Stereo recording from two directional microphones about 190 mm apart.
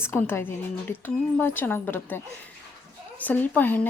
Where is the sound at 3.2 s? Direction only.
10° left (ahead or behind).